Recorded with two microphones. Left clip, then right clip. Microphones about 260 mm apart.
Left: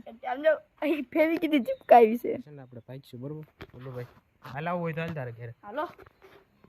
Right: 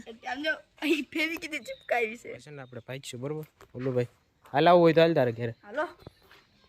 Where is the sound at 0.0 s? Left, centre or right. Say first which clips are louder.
Left 6 dB; centre.